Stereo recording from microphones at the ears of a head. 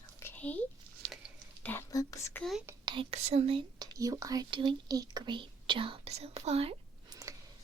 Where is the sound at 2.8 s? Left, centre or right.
Right.